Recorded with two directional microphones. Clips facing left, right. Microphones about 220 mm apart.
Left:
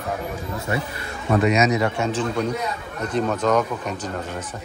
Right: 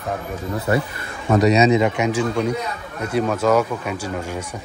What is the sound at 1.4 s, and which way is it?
Speech, 35° right (ahead or behind).